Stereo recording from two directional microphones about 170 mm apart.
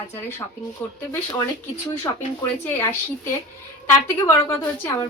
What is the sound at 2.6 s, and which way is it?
Speech, 15° left (ahead or behind).